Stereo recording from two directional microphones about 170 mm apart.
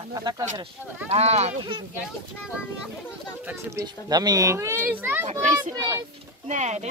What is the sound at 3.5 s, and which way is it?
A child's voice, 15° right (ahead or behind).